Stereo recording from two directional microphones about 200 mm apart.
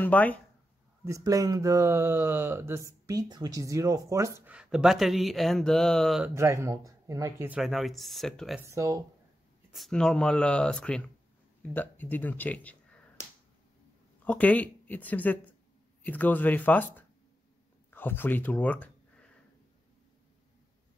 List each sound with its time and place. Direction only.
0.0 s speech: 10° left (ahead or behind)
1.0 s speech: 15° right (ahead or behind); by 6.3 s centre (ahead or behind)
6.3 s speech: 15° right (ahead or behind); by 8.5 s centre (ahead or behind)
8.5 s speech: 15° right (ahead or behind)
9.7 s a man's voice: centre (ahead or behind)
14.2 s speech: 5° left (ahead or behind)